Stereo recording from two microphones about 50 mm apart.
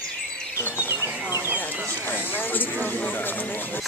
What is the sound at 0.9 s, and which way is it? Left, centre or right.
Chicken, right.